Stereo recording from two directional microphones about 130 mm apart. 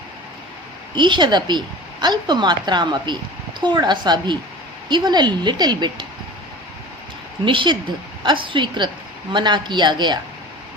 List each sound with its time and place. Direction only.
0.9 s a woman's voice: 35° right (ahead or behind)
7.4 s a woman's voice: 40° right (ahead or behind)